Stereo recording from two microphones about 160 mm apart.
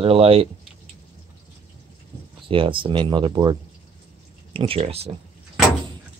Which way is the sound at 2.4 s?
35° right (ahead or behind).